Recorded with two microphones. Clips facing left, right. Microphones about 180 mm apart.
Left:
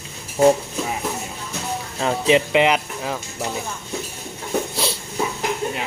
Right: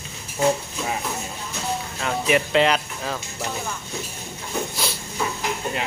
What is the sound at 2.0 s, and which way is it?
Speech, 20° left (ahead or behind).